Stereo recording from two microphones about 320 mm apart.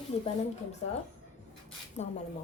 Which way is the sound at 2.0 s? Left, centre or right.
Left.